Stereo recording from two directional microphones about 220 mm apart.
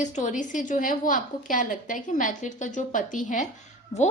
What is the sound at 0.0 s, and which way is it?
A woman's voice, 35° left (ahead or behind).